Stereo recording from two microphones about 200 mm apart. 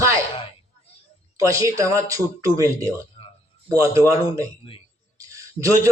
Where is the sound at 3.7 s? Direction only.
15° right (ahead or behind).